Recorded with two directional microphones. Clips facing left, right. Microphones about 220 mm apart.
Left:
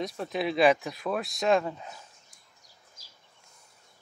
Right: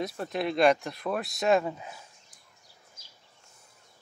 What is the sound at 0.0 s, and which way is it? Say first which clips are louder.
Speech: even; centre (ahead or behind).